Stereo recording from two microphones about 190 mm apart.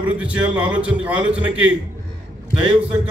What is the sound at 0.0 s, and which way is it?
A man's voice, 5° right (ahead or behind).